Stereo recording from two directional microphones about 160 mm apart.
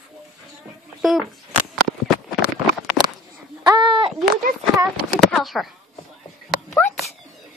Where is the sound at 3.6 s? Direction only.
30° right (ahead or behind).